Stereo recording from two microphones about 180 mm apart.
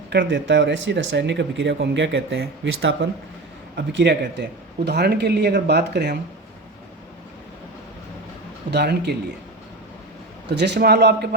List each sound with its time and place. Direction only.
0.1 s speech: 85° right; by 6.1 s 70° right (ahead or behind)
8.7 s speech: 65° right (ahead or behind)
10.5 s a man's voice: 70° right (ahead or behind)